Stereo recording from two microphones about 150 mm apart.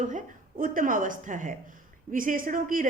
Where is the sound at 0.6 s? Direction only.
65° right (ahead or behind).